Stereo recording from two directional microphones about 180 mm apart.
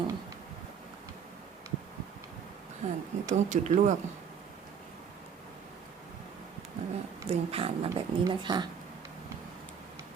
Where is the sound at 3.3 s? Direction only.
40° right (ahead or behind).